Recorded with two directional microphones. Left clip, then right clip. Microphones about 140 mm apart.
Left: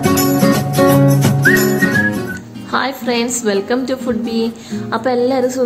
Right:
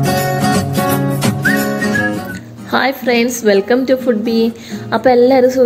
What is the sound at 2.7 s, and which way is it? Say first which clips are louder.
A woman's voice: right 3 dB; 20° right (ahead or behind).